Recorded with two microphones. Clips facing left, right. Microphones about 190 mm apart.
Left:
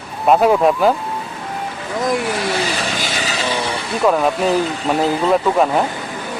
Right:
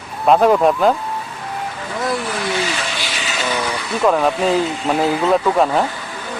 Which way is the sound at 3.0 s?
35° left (ahead or behind).